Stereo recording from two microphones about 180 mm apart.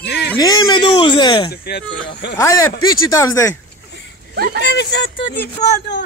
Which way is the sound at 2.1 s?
70° left (ahead or behind).